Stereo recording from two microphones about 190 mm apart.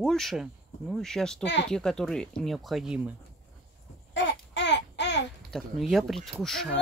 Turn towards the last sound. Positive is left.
turn(degrees=0)  # may be behind; listen again after turning